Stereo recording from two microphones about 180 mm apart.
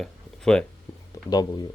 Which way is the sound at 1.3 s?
20° left (ahead or behind).